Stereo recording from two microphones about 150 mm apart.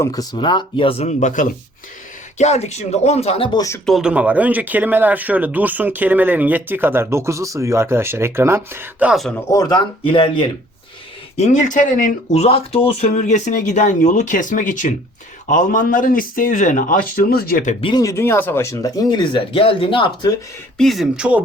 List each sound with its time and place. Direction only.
0.0 s speech: 25° left (ahead or behind)
3.8 s speech: 5° right (ahead or behind)
9.3 s speech: 20° left (ahead or behind)
11.3 s a man's voice: 55° left (ahead or behind)
12.3 s speech: 40° left (ahead or behind)
13.1 s a man's voice: 50° left (ahead or behind); by 17.7 s 80° left
17.7 s speech: 35° left (ahead or behind)
18.0 s speech: 15° left (ahead or behind); by 20.3 s 35° left (ahead or behind)
20.7 s speech: centre (ahead or behind)